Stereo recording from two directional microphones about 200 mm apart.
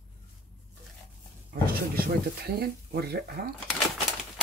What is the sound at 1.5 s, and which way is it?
Speech, 50° right (ahead or behind).